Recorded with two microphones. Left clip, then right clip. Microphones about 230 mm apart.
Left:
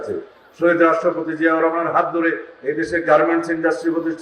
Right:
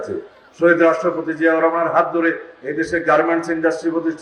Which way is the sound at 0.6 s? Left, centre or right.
Right.